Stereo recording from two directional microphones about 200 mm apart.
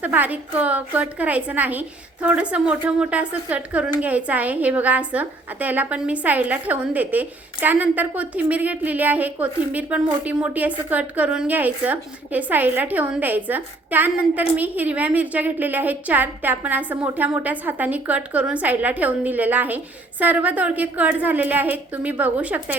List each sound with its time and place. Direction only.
0.0 s a woman's voice: 10° right (ahead or behind)